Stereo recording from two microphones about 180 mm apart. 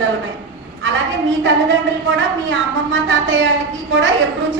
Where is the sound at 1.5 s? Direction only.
90° right.